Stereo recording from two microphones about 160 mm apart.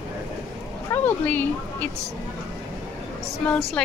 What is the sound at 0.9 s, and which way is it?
Speech, 10° left (ahead or behind).